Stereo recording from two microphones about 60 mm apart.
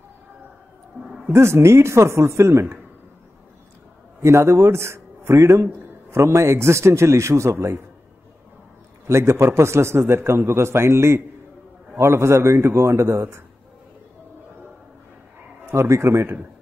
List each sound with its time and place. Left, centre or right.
1.3 s a man's voice: right
4.2 s a man's voice: right
9.0 s a man's voice: right
15.6 s a man's voice: right